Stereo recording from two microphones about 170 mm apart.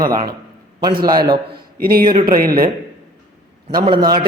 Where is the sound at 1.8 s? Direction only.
60° right (ahead or behind).